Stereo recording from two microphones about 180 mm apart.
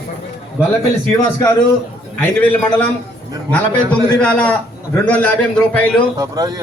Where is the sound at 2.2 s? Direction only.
10° left (ahead or behind).